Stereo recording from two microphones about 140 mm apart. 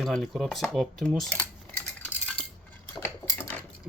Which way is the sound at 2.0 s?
10° left (ahead or behind).